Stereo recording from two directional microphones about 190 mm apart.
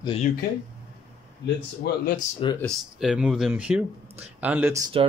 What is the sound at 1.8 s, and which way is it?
Speech, 50° left (ahead or behind).